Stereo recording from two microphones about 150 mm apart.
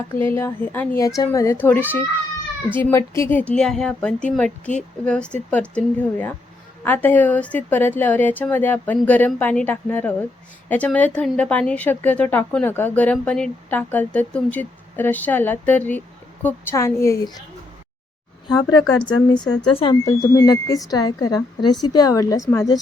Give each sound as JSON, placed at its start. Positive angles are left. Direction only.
{"t": 0.1, "sound": "speech", "side_deg": 15}
{"t": 3.5, "sound": "a woman's voice", "side_deg": 5}
{"t": 18.4, "sound": "speech", "side_deg": 30}
{"t": 20.1, "sound": "speech", "side_deg": 20}